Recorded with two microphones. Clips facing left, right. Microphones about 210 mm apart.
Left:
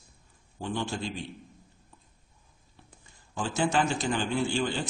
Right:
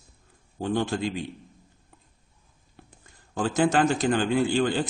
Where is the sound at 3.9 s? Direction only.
60° right (ahead or behind).